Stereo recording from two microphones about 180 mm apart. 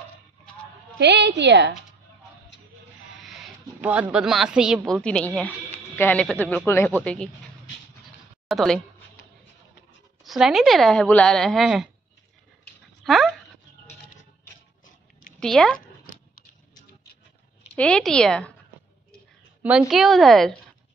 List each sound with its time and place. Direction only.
0.9 s a woman's voice: 70° right (ahead or behind)
3.2 s speech: centre (ahead or behind)
5.0 s a woman's voice: 5° left (ahead or behind)
8.5 s a woman's voice: centre (ahead or behind)
10.2 s a woman's voice: centre (ahead or behind)
13.0 s dog: centre (ahead or behind)
15.4 s a woman's voice: 5° left (ahead or behind)
17.7 s a woman's voice: 5° left (ahead or behind)
19.6 s a woman's voice: 5° right (ahead or behind)